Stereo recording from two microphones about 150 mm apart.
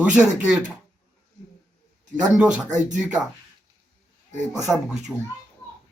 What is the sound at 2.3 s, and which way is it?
Speech, 5° right (ahead or behind).